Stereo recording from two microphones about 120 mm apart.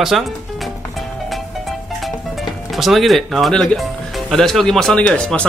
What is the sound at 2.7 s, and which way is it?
Speech, centre (ahead or behind).